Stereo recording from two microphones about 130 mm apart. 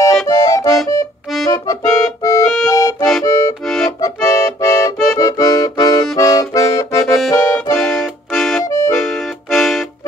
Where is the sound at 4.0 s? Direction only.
25° left (ahead or behind).